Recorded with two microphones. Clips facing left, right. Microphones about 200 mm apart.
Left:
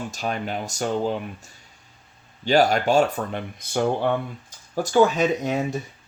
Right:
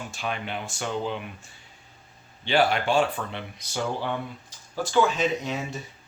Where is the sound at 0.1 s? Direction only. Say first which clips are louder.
Left 4 dB; 40° left (ahead or behind).